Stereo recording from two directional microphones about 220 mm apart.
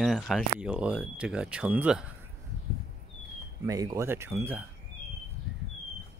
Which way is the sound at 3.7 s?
15° right (ahead or behind).